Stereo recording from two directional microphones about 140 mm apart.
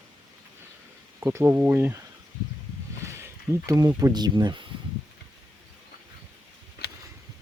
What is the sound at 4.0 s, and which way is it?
Speech, 30° right (ahead or behind).